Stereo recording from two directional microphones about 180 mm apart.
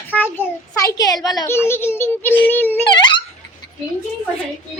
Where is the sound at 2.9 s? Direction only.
25° left (ahead or behind).